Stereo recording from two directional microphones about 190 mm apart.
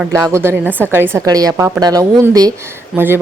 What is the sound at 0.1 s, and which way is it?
A woman's voice, 15° right (ahead or behind).